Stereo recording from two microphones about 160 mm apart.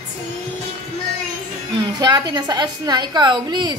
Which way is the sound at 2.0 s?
25° right (ahead or behind).